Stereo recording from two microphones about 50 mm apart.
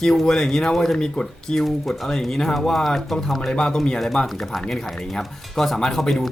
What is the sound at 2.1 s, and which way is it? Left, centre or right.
Speech, centre.